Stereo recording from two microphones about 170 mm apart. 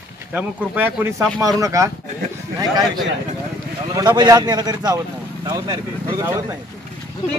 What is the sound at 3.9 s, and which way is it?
A man's voice, 25° right (ahead or behind).